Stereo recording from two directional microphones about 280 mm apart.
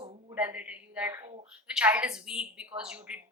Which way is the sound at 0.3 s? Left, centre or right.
Centre.